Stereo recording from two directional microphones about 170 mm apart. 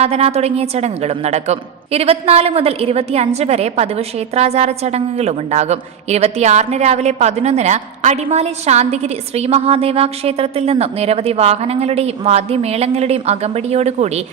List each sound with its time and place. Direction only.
0.0 s a woman's voice: 40° right (ahead or behind)